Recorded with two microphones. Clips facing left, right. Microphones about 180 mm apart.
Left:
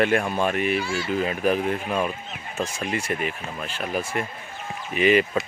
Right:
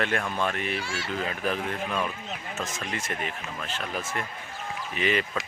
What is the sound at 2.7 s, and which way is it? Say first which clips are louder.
Speech: left 6 dB; 10° left (ahead or behind).